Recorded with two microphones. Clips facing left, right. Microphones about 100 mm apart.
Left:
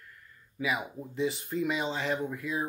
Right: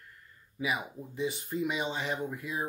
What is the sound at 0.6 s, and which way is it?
Speech, 15° right (ahead or behind).